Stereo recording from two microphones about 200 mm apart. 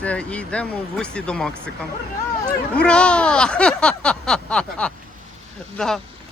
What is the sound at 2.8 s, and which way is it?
Speech, 5° left (ahead or behind).